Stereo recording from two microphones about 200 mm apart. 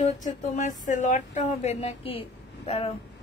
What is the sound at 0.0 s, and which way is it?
Speech, 40° left (ahead or behind).